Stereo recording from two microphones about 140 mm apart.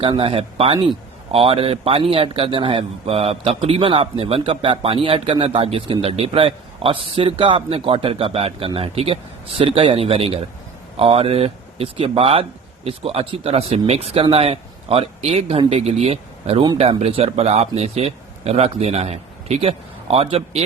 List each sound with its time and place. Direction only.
0.0 s a man's voice: 40° right (ahead or behind)